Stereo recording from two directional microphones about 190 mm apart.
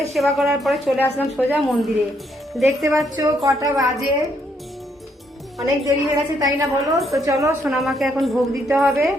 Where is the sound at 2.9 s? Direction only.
20° right (ahead or behind).